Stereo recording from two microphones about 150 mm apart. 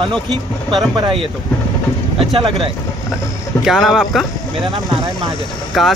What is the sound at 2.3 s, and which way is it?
Speech, 35° right (ahead or behind).